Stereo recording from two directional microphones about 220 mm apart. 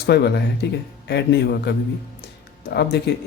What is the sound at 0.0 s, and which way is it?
Speech, 50° left (ahead or behind).